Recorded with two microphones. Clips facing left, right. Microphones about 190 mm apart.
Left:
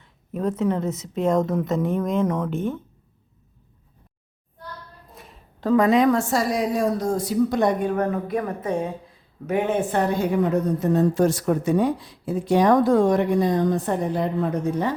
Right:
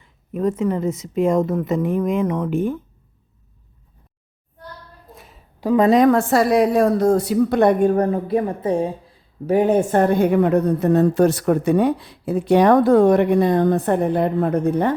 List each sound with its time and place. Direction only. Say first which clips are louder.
0.0 s speech: right 4 dB; 5° right (ahead or behind)
5.1 s a sound: even; centre (ahead or behind)
5.6 s a woman's voice: right 2 dB; 20° right (ahead or behind)
5.9 s a woman's voice: right 4 dB; 50° right (ahead or behind)
7.9 s a woman's voice: right 5 dB; 35° right (ahead or behind); by 14.9 s 55° right (ahead or behind)